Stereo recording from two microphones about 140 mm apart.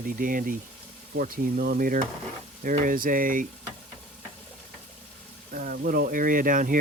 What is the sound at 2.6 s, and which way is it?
Speech, 75° right (ahead or behind).